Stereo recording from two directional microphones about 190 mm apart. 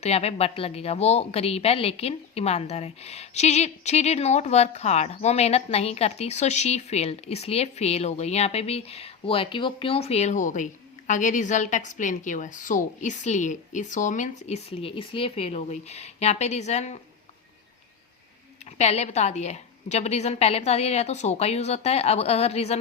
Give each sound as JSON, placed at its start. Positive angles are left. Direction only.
{"t": 0.0, "sound": "speech", "side_deg": 35}
{"t": 18.6, "sound": "speech", "side_deg": 35}